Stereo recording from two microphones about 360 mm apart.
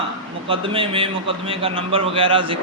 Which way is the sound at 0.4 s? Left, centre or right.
Centre.